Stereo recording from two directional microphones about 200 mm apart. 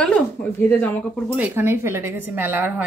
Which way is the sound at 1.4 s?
10° right (ahead or behind).